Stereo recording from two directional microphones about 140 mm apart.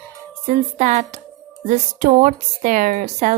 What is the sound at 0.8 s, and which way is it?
A woman's voice, 60° right (ahead or behind).